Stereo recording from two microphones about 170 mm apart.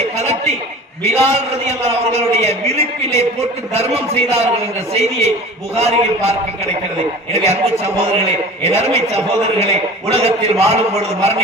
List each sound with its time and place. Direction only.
0.2 s chuckle: 40° right (ahead or behind)
1.3 s a man's voice: 40° right (ahead or behind)
7.3 s a man's voice: 40° right (ahead or behind)